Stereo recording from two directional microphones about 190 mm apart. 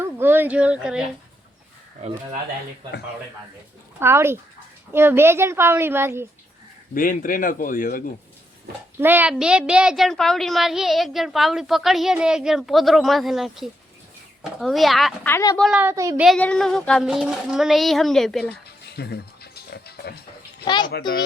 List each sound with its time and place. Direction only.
0.0 s speech: 10° right (ahead or behind)
4.0 s speech: 15° right (ahead or behind)
6.9 s speech: 45° left (ahead or behind)
9.0 s a child's voice: 10° right (ahead or behind)
15.3 s a woman's voice: 15° left (ahead or behind)
15.5 s a child's voice: centre (ahead or behind)
15.8 s speech: 15° right (ahead or behind)
16.2 s a child's voice: 5° left (ahead or behind)
18.9 s a sound: 55° left (ahead or behind)